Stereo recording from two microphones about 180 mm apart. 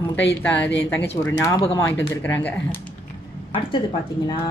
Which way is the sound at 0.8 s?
10° left (ahead or behind).